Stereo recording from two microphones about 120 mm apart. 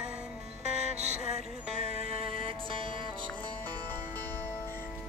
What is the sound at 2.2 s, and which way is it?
Music, 50° right (ahead or behind).